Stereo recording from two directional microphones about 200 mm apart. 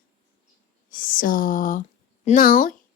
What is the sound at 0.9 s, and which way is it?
Speech, 45° left (ahead or behind).